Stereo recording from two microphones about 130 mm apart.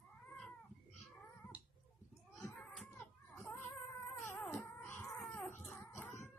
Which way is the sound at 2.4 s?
5° left (ahead or behind).